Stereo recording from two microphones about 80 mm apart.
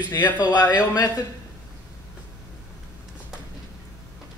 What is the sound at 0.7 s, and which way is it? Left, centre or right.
Speech, left.